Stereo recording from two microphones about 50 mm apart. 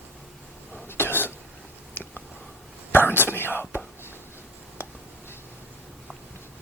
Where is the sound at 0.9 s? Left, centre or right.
Left.